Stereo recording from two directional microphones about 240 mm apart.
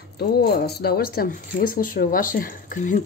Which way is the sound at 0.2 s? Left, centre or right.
Left.